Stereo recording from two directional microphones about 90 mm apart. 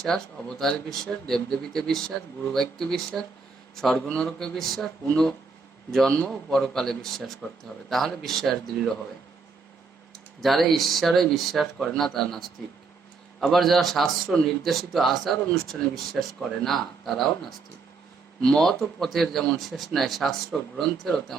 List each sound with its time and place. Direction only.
0.1 s speech: 5° left (ahead or behind)
10.4 s speech: centre (ahead or behind)